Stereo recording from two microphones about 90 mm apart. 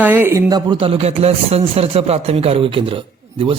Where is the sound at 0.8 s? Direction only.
90° right.